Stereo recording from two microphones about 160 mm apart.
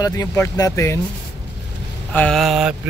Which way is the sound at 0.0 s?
20° left (ahead or behind).